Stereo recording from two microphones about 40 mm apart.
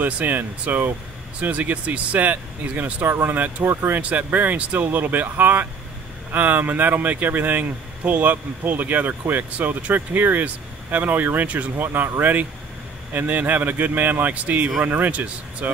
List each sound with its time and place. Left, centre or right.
0.0 s speech: right
3.1 s speech: right
3.3 s speech: right
3.6 s speech: right
4.0 s speech: right